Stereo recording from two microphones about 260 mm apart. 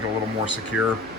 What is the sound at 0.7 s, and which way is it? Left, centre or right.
Speech, left.